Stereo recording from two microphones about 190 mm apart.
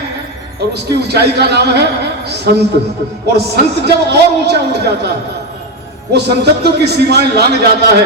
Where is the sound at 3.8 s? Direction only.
60° right (ahead or behind).